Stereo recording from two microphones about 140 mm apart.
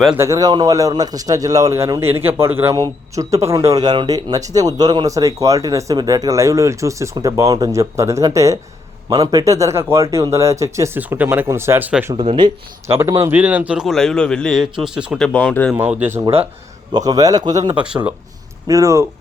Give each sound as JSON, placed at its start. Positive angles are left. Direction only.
{"t": 0.2, "sound": "a man's voice", "side_deg": -25}
{"t": 12.1, "sound": "speech", "side_deg": -45}
{"t": 12.9, "sound": "a man's voice", "side_deg": -20}
{"t": 15.3, "sound": "speech", "side_deg": 10}
{"t": 15.7, "sound": "speech", "side_deg": -10}
{"t": 16.9, "sound": "a man's voice", "side_deg": -25}
{"t": 17.7, "sound": "speech", "side_deg": -10}
{"t": 18.7, "sound": "a man's voice", "side_deg": -20}